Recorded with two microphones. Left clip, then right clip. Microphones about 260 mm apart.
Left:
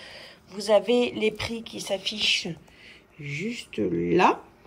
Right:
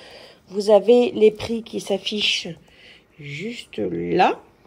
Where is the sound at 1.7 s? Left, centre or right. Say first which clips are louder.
Right 4 dB; centre.